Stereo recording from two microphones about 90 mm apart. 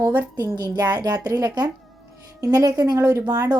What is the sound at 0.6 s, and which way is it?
A woman's voice, 50° right (ahead or behind).